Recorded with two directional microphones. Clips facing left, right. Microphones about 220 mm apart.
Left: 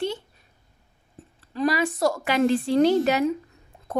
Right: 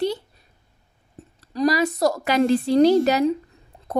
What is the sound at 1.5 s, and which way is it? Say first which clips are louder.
Female singing: right 3 dB; 40° right (ahead or behind).